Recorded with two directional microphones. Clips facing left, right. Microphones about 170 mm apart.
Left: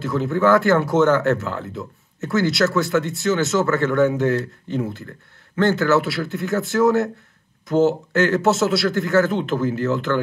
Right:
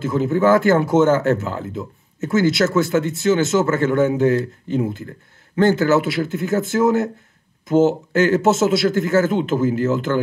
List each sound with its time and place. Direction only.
0.0 s speech: 20° right (ahead or behind)